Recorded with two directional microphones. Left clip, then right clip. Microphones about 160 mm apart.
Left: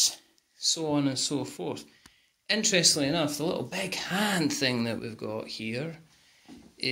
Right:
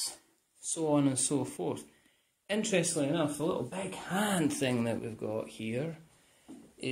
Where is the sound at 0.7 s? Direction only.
Centre (ahead or behind).